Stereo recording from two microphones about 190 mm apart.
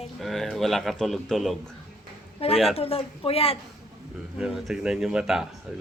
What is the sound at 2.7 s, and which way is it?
Speech, 30° left (ahead or behind).